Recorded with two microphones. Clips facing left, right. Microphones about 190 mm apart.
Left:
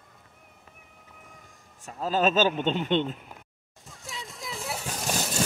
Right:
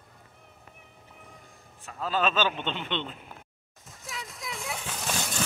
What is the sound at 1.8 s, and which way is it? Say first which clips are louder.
A man's voice: left 3 dB; 40° left (ahead or behind).